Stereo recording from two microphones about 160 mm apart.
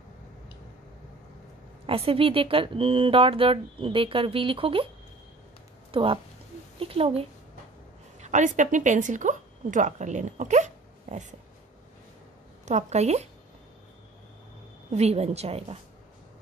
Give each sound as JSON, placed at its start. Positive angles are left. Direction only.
{"t": 1.9, "sound": "speech", "side_deg": -35}
{"t": 5.9, "sound": "a sound", "side_deg": -35}
{"t": 6.8, "sound": "speech", "side_deg": -35}
{"t": 8.2, "sound": "a woman's voice", "side_deg": -50}
{"t": 12.6, "sound": "speech", "side_deg": -45}
{"t": 14.9, "sound": "speech", "side_deg": -40}